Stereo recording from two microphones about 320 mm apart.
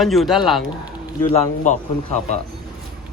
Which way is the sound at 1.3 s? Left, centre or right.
Left.